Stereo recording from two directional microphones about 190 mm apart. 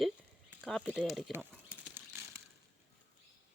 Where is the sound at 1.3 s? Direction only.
10° right (ahead or behind).